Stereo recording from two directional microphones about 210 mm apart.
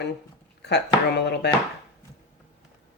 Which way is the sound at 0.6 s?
55° left (ahead or behind).